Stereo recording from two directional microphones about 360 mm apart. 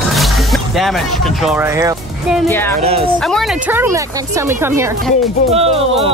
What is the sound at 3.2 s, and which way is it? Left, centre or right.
Speech, centre.